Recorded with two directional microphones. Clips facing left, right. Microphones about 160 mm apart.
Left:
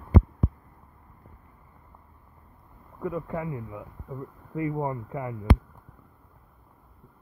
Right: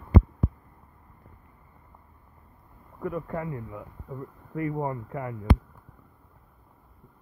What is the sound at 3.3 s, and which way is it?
Speech, 10° left (ahead or behind).